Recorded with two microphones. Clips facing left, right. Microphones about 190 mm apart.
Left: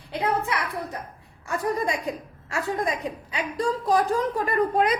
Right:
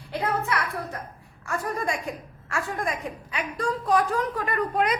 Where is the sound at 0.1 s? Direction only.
15° left (ahead or behind).